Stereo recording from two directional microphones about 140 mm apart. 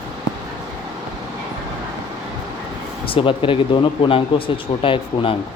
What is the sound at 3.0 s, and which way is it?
Speech, 40° left (ahead or behind).